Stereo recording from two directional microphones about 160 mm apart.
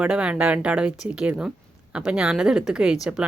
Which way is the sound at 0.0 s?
5° right (ahead or behind).